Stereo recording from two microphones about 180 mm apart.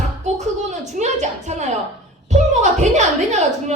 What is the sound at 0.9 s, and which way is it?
Speech, 40° right (ahead or behind).